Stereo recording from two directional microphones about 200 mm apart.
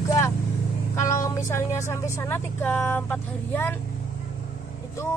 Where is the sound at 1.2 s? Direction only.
15° left (ahead or behind).